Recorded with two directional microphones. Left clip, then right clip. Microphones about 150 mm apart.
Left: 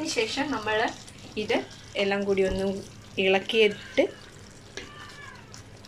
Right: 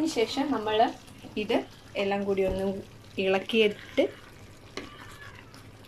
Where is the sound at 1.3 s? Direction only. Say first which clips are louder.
Left 1 dB; 10° right (ahead or behind).